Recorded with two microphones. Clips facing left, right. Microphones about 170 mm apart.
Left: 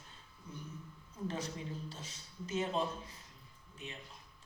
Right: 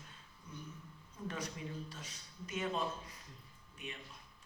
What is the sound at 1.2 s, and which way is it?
Speech, 30° left (ahead or behind).